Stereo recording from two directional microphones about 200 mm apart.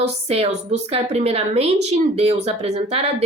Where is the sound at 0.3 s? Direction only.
30° right (ahead or behind).